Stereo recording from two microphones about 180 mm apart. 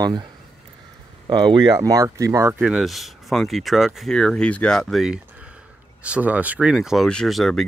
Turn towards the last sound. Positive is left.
turn(degrees=0)  # may be behind; listen again after turning